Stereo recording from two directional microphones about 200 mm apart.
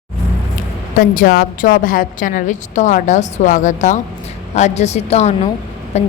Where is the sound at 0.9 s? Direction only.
45° left (ahead or behind).